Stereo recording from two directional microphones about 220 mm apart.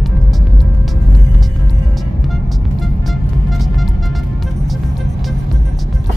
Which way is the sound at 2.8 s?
Centre (ahead or behind).